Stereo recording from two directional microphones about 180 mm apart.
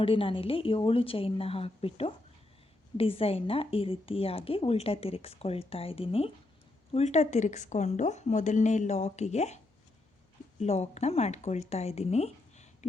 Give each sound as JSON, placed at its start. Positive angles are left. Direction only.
{"t": 0.0, "sound": "a woman's voice", "side_deg": 30}
{"t": 10.6, "sound": "speech", "side_deg": 40}